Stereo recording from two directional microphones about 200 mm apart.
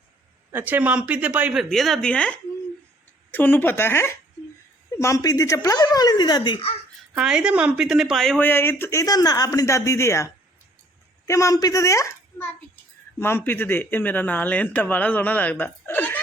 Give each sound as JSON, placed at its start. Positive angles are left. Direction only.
{"t": 0.5, "sound": "speech", "side_deg": -10}
{"t": 7.2, "sound": "speech", "side_deg": -5}
{"t": 11.3, "sound": "a child's voice", "side_deg": 15}